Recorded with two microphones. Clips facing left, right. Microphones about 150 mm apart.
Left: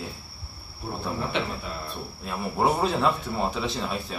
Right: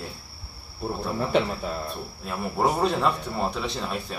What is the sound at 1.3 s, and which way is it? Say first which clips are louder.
Cricket: right 8 dB; 40° right (ahead or behind).